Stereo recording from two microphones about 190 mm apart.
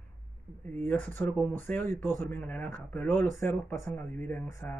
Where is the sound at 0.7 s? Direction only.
10° left (ahead or behind).